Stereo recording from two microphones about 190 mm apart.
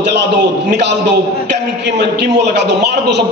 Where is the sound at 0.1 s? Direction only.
65° right (ahead or behind).